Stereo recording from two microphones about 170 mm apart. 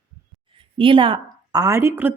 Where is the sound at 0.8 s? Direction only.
30° right (ahead or behind).